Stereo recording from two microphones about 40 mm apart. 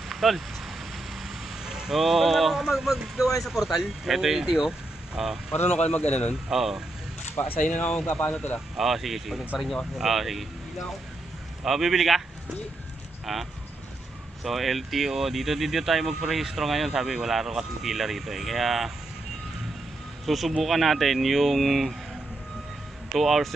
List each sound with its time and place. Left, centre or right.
0.1 s vehicle: centre
1.2 s vehicle: centre
2.0 s speech: centre
5.9 s a man's voice: left
6.5 s speech: centre
7.5 s a man's voice: left
8.7 s speech: centre
11.6 s speech: centre
13.2 s speech: centre
20.2 s speech: centre
23.1 s speech: centre